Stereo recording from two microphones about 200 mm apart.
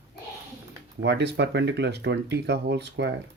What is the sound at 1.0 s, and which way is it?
Speech, 60° right (ahead or behind).